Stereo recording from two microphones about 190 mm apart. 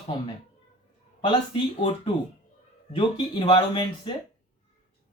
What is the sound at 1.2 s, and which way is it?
Speech, 25° left (ahead or behind).